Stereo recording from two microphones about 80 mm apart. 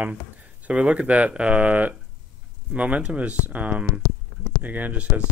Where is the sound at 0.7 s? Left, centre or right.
Centre.